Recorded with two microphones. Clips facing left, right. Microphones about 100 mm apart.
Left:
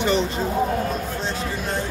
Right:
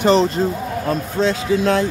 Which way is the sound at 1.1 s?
90° right.